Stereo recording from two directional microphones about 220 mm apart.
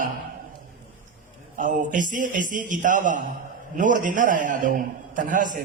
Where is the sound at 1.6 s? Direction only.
35° right (ahead or behind).